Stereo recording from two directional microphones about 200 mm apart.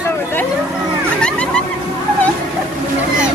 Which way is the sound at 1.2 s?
5° left (ahead or behind).